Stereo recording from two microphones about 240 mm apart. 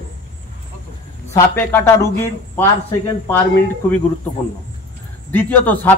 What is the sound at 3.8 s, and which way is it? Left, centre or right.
Speech, centre.